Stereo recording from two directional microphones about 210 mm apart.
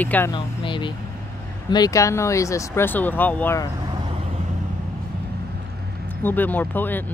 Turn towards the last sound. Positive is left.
turn(degrees=10)  # may be behind; listen again after turning